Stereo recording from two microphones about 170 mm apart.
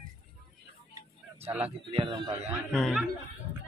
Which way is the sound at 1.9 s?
30° right (ahead or behind).